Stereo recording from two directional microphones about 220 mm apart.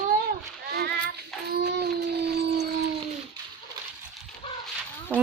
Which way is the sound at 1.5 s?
45° right (ahead or behind).